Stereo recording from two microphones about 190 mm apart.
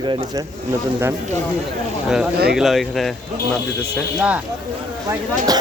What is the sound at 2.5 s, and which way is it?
Speech, centre (ahead or behind).